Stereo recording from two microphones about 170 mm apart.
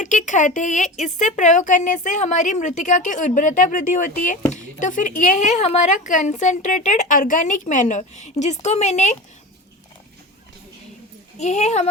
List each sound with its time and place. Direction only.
0.0 s speech: 45° left (ahead or behind)
11.3 s speech: 40° left (ahead or behind)